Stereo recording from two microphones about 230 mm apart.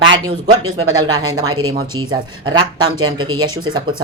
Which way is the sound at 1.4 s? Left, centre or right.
Right.